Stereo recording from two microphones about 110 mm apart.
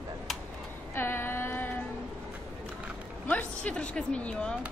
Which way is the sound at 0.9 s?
20° left (ahead or behind).